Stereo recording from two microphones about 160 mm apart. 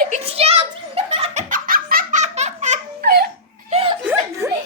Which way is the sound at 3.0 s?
75° right (ahead or behind).